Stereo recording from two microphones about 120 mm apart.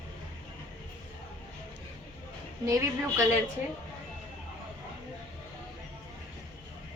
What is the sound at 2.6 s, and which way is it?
Speech, 25° right (ahead or behind).